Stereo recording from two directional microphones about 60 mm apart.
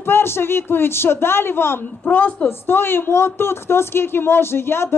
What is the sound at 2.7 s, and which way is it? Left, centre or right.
Speech, left.